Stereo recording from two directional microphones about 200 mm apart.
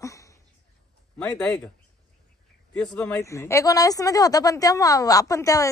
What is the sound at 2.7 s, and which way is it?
A woman's voice, 5° left (ahead or behind).